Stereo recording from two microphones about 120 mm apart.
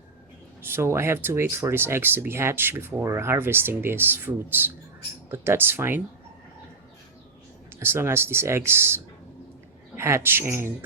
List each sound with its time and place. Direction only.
0.6 s speech: 20° right (ahead or behind)
7.8 s speech: 20° right (ahead or behind)
10.0 s speech: 20° right (ahead or behind)